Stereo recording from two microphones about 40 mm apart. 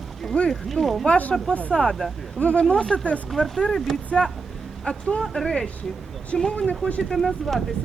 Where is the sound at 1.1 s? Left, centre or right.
Left.